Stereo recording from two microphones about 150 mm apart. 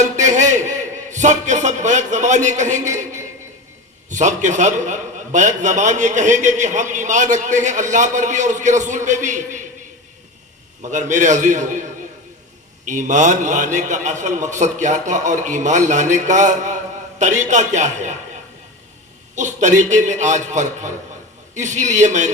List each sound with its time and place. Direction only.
0.0 s a sound: 55° right (ahead or behind)
4.1 s a man's voice: 55° right (ahead or behind)
10.9 s a man's voice: 55° right (ahead or behind)
19.4 s a man's voice: 55° right (ahead or behind)